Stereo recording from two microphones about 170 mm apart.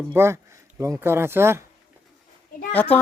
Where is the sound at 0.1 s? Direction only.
15° right (ahead or behind).